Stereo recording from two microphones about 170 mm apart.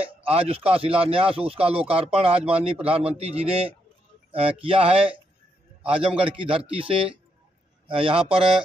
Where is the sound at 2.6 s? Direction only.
35° right (ahead or behind).